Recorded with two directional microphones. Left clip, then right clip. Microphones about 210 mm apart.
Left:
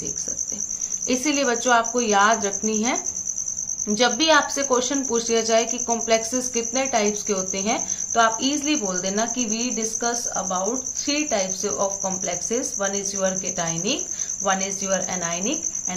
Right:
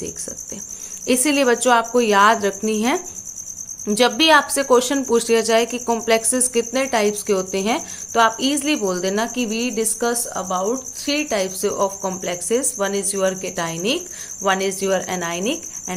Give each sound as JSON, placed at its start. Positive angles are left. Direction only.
{"t": 1.0, "sound": "cricket", "side_deg": -45}